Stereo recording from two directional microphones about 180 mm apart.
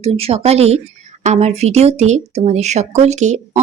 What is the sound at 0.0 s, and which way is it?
A woman's voice, 35° right (ahead or behind).